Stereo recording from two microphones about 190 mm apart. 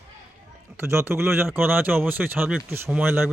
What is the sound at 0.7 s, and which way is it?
Speech, 15° right (ahead or behind).